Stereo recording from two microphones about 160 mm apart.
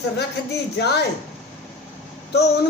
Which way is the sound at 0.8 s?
90° left.